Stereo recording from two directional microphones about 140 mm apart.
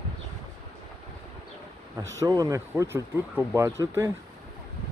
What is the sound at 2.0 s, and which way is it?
Speech, 25° right (ahead or behind).